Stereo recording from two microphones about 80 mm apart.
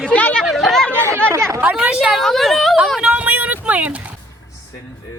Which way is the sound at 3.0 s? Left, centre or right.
Centre.